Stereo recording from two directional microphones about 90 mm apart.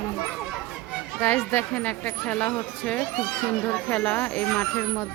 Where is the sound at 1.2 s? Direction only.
20° left (ahead or behind).